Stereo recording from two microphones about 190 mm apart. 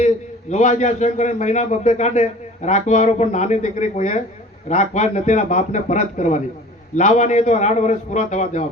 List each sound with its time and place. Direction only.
0.5 s a man's voice: 40° left (ahead or behind)